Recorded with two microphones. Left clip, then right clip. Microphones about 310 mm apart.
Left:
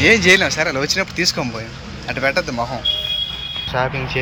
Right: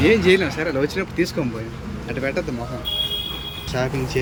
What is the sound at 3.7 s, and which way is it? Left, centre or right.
Speech, centre.